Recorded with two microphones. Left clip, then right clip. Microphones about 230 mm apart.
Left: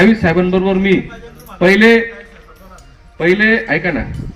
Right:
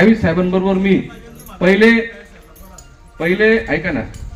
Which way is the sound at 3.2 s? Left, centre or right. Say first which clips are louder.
Left 1 dB; left.